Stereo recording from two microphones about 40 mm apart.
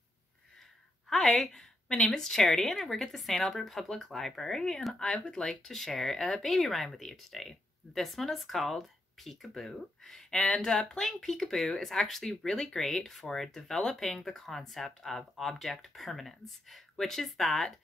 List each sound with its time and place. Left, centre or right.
1.2 s a woman's voice: centre; by 5.4 s left
5.6 s a woman's voice: centre